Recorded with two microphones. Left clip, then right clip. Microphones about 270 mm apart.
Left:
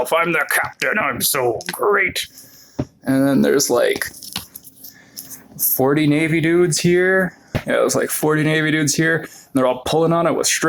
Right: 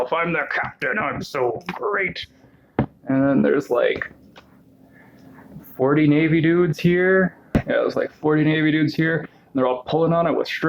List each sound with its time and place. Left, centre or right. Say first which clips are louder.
0.0 s speech: left 4 dB; left
5.7 s speech: left 1 dB; left